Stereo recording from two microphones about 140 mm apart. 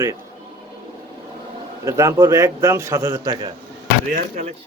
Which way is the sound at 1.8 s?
20° right (ahead or behind).